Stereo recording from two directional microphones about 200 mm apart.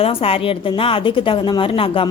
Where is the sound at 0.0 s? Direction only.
30° left (ahead or behind).